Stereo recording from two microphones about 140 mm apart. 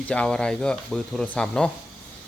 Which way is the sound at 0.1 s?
5° left (ahead or behind).